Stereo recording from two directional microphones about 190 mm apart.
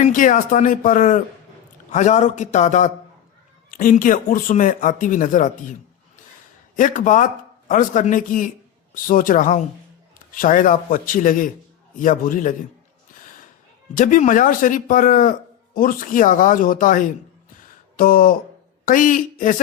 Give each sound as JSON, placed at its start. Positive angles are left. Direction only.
{"t": 0.0, "sound": "a man's voice", "side_deg": 45}
{"t": 6.7, "sound": "speech", "side_deg": 45}
{"t": 13.9, "sound": "speech", "side_deg": 45}
{"t": 17.9, "sound": "a sound", "side_deg": 45}
{"t": 18.9, "sound": "speech", "side_deg": 45}